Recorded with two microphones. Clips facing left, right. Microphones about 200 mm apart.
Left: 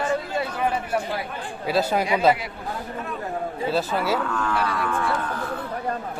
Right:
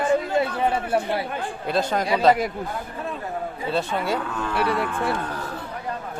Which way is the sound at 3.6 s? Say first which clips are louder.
Left 1 dB; 5° left (ahead or behind).